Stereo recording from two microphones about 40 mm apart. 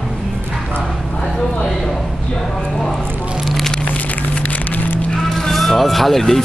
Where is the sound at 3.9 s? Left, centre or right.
Left.